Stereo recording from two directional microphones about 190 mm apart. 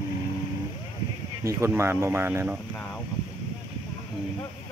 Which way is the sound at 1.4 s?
15° right (ahead or behind).